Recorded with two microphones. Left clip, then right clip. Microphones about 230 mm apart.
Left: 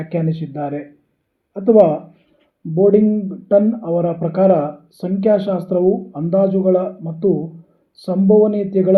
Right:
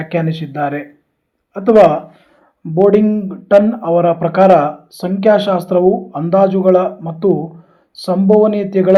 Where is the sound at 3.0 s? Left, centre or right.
Right.